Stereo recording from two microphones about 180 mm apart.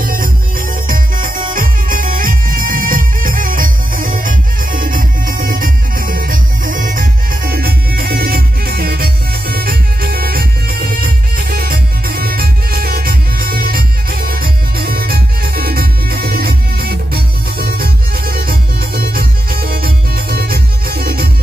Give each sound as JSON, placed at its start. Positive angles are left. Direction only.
{"t": 0.0, "sound": "music", "side_deg": -50}